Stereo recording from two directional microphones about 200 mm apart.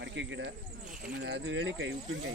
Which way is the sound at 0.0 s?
65° right (ahead or behind).